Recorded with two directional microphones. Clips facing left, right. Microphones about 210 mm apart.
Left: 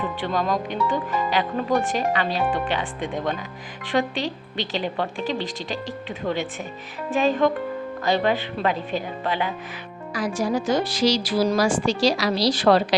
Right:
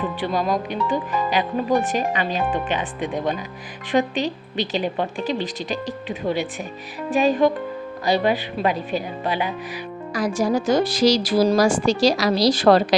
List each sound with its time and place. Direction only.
0.2 s a woman's voice: 10° right (ahead or behind)
10.2 s a woman's voice: 40° right (ahead or behind)